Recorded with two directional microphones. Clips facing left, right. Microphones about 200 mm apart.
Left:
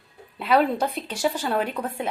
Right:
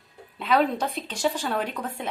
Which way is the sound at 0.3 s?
10° left (ahead or behind).